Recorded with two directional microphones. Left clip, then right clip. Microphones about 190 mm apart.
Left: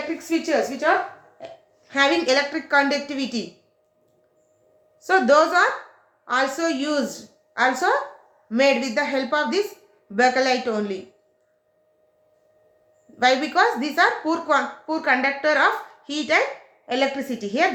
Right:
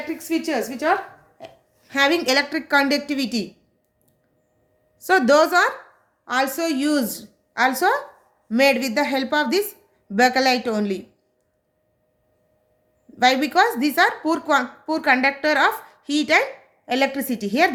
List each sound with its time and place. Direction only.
0.2 s a woman's voice: 55° right (ahead or behind)
1.4 s a sound: 60° right (ahead or behind)
1.9 s a woman's voice: 55° right (ahead or behind)
4.9 s a woman's voice: 60° right (ahead or behind)
13.1 s a woman's voice: 55° right (ahead or behind)